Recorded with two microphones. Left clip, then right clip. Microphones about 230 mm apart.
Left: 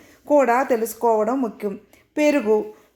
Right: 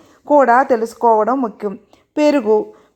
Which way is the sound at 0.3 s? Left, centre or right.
Centre.